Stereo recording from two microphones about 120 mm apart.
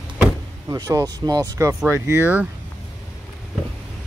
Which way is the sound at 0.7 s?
30° right (ahead or behind).